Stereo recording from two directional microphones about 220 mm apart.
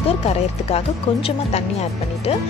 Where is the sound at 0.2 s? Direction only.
30° left (ahead or behind).